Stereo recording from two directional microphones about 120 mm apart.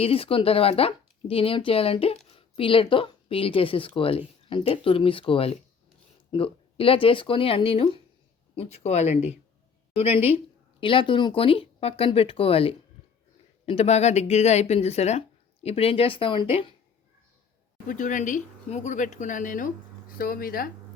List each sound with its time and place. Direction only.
0.0 s speech: 50° left (ahead or behind)
9.9 s speech: 55° left (ahead or behind)
13.7 s speech: 60° left (ahead or behind); by 16.7 s 45° left (ahead or behind)
17.9 s speech: 90° left